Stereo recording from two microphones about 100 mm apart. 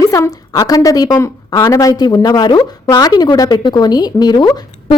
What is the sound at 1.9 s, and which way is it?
Speech, 40° left (ahead or behind).